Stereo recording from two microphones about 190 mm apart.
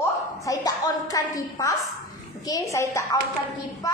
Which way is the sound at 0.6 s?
20° left (ahead or behind).